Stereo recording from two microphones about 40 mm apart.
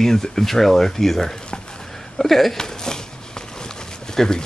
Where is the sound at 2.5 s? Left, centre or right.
Centre.